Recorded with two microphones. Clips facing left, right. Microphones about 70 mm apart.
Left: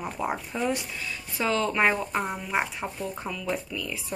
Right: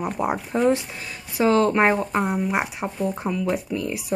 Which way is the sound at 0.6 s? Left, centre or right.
Right.